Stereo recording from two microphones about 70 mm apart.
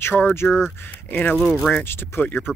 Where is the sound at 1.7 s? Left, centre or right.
Left.